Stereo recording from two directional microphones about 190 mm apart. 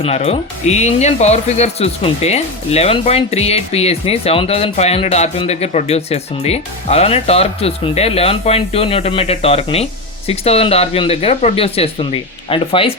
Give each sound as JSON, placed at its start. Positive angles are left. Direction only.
{"t": 0.0, "sound": "speech", "side_deg": 35}